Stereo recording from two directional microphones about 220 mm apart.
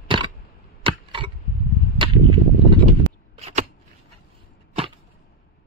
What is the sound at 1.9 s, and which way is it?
Whip, 20° right (ahead or behind).